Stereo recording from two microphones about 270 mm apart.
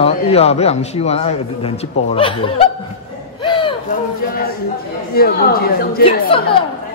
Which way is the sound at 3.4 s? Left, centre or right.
Centre.